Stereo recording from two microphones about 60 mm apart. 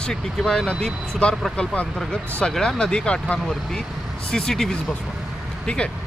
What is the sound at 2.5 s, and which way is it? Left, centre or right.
Speech, centre.